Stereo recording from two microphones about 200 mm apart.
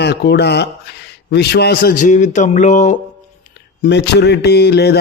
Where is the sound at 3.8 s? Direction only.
55° left (ahead or behind).